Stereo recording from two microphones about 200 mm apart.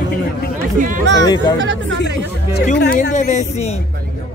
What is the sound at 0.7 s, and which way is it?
Speech, 40° right (ahead or behind).